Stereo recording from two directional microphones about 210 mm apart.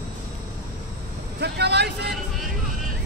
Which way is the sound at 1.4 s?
50° right (ahead or behind).